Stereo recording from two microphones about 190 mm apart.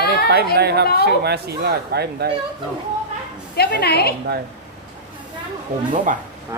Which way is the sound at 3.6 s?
55° left (ahead or behind).